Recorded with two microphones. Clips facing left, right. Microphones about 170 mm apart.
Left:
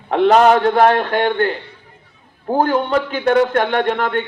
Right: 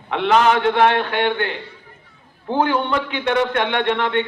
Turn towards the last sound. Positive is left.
turn(degrees=45)  # may be behind; listen again after turning